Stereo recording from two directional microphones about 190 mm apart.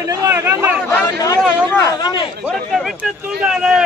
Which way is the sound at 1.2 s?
20° left (ahead or behind).